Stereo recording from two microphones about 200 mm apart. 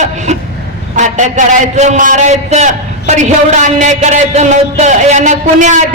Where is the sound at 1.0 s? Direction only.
35° right (ahead or behind).